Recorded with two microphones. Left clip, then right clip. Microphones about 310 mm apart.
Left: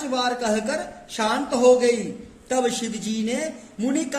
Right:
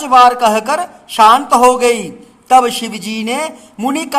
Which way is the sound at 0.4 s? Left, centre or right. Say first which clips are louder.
Right 12 dB; centre.